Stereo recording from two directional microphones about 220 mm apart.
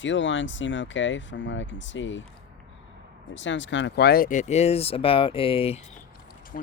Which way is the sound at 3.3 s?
55° left (ahead or behind).